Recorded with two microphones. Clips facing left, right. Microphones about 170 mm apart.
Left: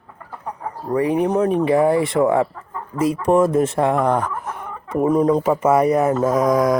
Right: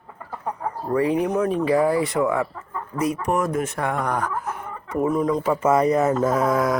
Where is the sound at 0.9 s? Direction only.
35° left (ahead or behind).